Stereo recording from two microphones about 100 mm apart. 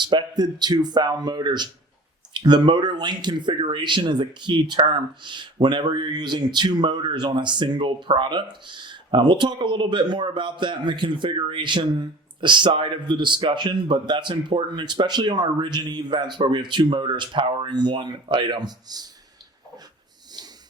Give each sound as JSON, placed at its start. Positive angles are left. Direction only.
{"t": 0.0, "sound": "speech", "side_deg": -50}